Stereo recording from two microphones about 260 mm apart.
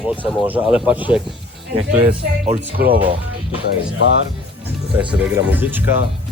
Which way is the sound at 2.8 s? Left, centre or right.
Right.